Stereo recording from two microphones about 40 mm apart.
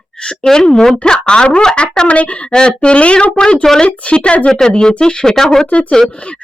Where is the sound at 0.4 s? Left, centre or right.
Centre.